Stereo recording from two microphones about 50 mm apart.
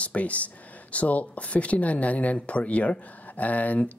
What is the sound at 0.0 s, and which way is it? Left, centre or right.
Speech, left.